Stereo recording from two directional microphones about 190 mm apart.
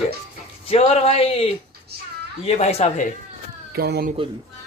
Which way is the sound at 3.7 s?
55° right (ahead or behind).